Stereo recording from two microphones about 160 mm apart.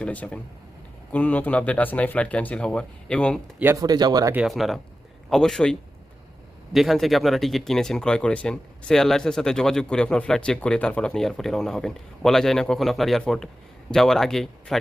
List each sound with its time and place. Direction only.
0.0 s speech: 10° left (ahead or behind)
3.6 s speech: 15° right (ahead or behind)
3.8 s speech: 25° right (ahead or behind)
4.4 s speech: centre (ahead or behind)
6.7 s speech: centre (ahead or behind)